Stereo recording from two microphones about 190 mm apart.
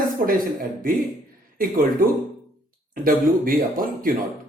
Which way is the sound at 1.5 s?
50° right (ahead or behind).